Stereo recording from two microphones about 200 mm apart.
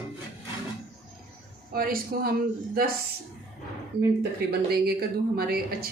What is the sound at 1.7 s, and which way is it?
Speech, 45° right (ahead or behind).